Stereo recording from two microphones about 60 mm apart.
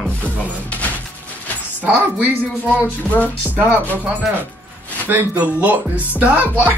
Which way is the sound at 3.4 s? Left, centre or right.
Right.